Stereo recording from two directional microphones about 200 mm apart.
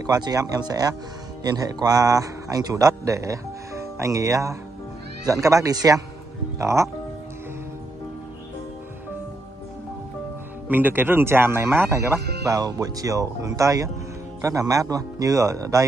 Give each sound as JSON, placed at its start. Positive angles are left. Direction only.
{"t": 0.0, "sound": "a man's voice", "side_deg": -20}
{"t": 10.7, "sound": "a man's voice", "side_deg": -10}
{"t": 12.2, "sound": "speech", "side_deg": -55}
{"t": 12.4, "sound": "a man's voice", "side_deg": -15}